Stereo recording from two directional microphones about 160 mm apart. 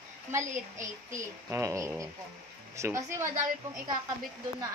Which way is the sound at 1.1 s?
20° right (ahead or behind).